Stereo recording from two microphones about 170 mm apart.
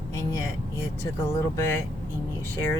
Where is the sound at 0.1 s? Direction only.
15° left (ahead or behind).